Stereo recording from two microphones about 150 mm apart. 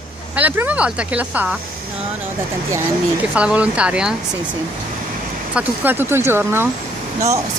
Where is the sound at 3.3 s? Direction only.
10° right (ahead or behind).